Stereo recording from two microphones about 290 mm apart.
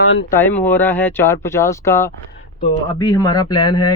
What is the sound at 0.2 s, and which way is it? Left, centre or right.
Speech, centre.